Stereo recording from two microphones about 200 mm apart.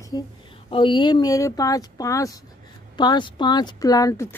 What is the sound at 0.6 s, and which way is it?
Speech, 25° left (ahead or behind).